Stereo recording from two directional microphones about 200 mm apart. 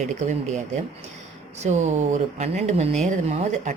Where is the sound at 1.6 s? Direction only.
35° right (ahead or behind).